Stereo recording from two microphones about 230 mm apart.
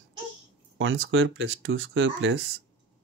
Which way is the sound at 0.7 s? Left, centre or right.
Right.